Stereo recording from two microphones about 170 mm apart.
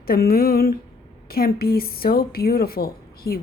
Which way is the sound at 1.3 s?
60° left (ahead or behind).